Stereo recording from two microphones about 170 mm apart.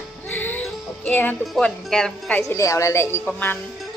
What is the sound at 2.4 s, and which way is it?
Speech, 15° left (ahead or behind).